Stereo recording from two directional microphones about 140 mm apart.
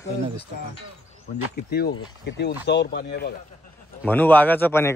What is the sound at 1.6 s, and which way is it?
Speech, 90° left.